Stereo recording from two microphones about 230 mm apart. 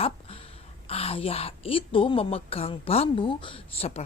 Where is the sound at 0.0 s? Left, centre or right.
Left.